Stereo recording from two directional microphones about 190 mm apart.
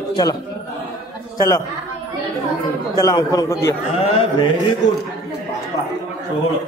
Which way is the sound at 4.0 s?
30° left (ahead or behind).